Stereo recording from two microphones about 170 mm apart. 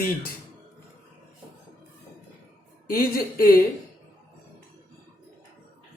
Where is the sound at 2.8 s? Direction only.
60° left (ahead or behind).